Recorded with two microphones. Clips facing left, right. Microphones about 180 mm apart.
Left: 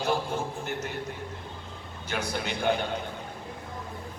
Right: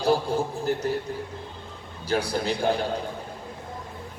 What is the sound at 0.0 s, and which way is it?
Speech, 35° right (ahead or behind).